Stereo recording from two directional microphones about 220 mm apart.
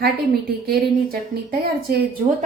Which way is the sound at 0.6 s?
45° right (ahead or behind).